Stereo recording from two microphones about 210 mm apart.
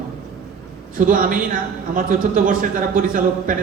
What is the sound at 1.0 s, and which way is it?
Speech, 40° right (ahead or behind).